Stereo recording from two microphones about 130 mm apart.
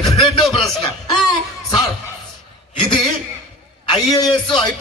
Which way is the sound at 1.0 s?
30° left (ahead or behind).